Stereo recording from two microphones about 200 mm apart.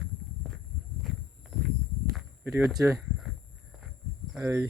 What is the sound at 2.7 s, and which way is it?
Speech, 15° right (ahead or behind).